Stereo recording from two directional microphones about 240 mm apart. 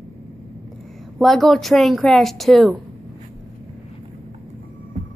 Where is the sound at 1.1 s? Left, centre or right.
Centre.